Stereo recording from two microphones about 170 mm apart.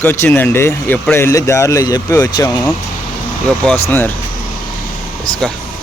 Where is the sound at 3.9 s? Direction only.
10° left (ahead or behind).